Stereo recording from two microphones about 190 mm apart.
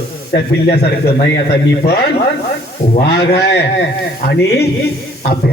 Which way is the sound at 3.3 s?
60° left (ahead or behind).